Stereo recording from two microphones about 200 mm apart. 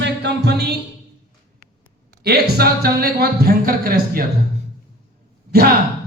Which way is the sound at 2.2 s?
50° right (ahead or behind).